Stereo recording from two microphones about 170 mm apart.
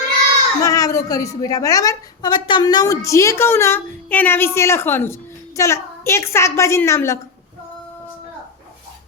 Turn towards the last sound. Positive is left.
turn(degrees=15)  # may be behind; listen again after turning